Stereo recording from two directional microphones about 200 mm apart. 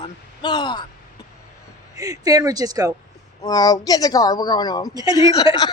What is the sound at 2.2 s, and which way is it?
Speech, 20° right (ahead or behind).